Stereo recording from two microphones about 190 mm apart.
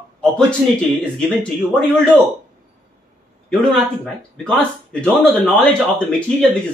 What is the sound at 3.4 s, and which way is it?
Speech, 5° left (ahead or behind).